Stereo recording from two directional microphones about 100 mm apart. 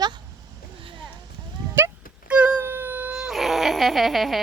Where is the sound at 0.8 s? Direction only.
60° right (ahead or behind).